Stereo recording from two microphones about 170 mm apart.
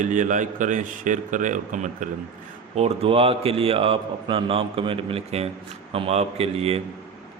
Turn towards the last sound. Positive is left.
turn(degrees=-35)  # may be behind; listen again after turning